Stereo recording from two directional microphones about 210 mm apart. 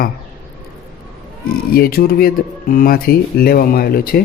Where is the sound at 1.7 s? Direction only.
45° left (ahead or behind).